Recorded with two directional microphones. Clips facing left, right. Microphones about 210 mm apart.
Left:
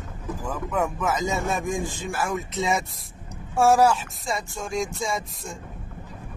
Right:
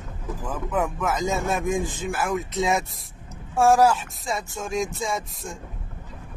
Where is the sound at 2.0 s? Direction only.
Centre (ahead or behind).